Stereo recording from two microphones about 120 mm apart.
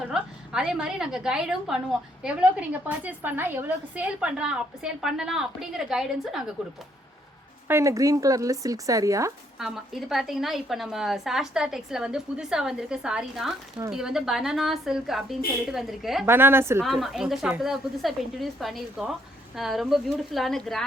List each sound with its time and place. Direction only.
0.0 s a woman's voice: 5° right (ahead or behind)
7.7 s speech: 25° right (ahead or behind)
9.6 s a woman's voice: 5° right (ahead or behind)
16.2 s speech: 20° right (ahead or behind)
16.8 s a woman's voice: centre (ahead or behind)